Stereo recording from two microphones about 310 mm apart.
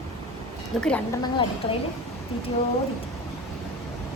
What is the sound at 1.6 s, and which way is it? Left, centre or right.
Speech, centre.